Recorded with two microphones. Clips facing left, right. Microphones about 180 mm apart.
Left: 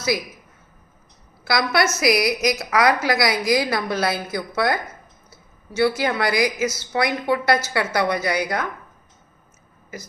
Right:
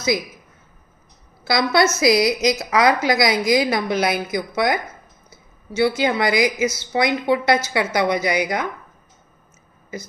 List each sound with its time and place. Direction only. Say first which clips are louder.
1.5 s a woman's voice: right 3 dB; 25° right (ahead or behind)